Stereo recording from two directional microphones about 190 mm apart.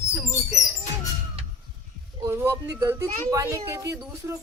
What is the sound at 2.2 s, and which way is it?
Speech, 15° right (ahead or behind).